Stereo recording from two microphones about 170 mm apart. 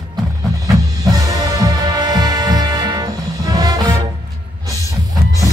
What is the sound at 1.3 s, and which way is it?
Music, 25° right (ahead or behind).